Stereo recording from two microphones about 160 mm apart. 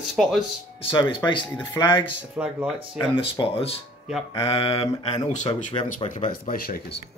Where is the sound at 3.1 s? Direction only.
30° left (ahead or behind).